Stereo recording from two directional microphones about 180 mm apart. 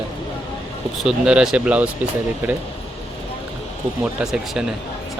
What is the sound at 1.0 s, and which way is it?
Speech, 5° right (ahead or behind).